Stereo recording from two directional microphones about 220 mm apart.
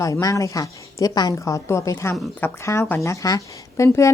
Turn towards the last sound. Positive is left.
turn(degrees=15)  # may be behind; listen again after turning